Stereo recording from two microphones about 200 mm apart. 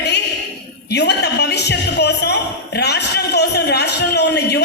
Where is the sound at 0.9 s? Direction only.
55° left (ahead or behind).